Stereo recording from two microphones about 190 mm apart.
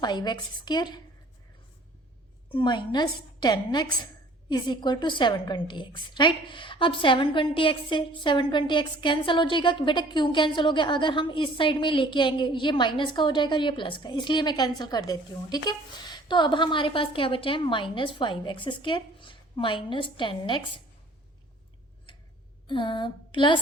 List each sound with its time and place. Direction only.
0.0 s a woman's voice: 20° left (ahead or behind)
2.5 s a woman's voice: 25° left (ahead or behind)
22.6 s speech: 25° left (ahead or behind)